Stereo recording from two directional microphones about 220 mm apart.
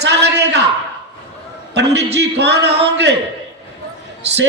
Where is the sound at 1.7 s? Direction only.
50° right (ahead or behind).